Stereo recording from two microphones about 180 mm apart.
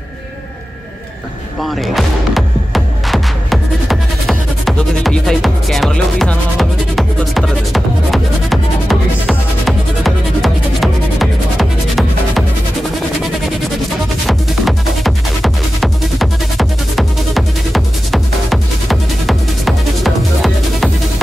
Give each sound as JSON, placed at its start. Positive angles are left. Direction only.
{"t": 1.6, "sound": "music", "side_deg": 0}
{"t": 14.2, "sound": "music", "side_deg": 0}